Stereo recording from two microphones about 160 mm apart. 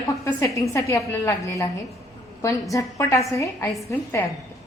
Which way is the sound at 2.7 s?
20° left (ahead or behind).